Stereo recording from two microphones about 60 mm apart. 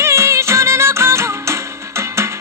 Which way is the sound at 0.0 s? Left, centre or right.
Right.